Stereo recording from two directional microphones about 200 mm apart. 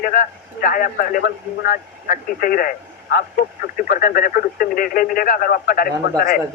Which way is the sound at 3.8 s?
45° left (ahead or behind).